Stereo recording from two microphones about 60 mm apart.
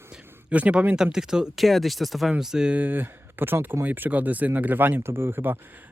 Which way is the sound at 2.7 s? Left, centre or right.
Right.